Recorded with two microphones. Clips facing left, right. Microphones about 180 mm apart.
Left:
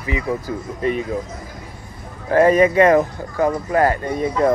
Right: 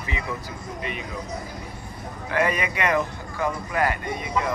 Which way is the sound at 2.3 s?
45° left (ahead or behind).